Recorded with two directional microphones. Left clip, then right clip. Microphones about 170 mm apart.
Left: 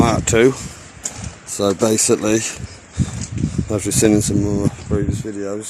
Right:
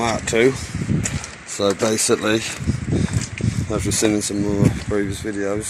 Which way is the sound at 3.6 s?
45° left (ahead or behind).